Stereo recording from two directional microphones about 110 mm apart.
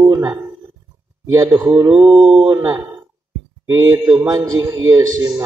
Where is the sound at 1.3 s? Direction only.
30° right (ahead or behind).